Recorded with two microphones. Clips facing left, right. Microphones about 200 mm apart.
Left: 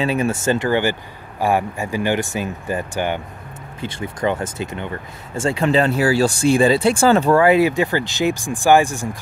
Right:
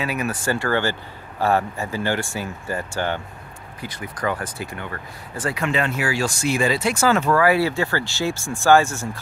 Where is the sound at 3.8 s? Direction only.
25° left (ahead or behind).